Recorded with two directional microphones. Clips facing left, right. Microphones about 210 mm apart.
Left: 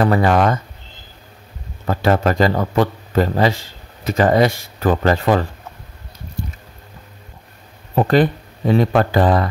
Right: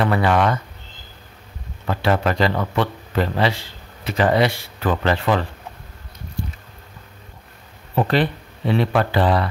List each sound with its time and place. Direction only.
0.0 s speech: 40° left (ahead or behind)
1.9 s a man's voice: 45° left (ahead or behind)
7.9 s a man's voice: 45° left (ahead or behind)